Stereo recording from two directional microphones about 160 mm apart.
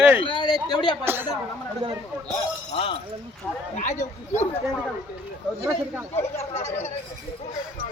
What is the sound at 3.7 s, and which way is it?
Speech, 50° left (ahead or behind).